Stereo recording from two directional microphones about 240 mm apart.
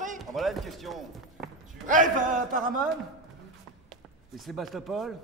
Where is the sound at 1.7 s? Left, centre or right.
Right.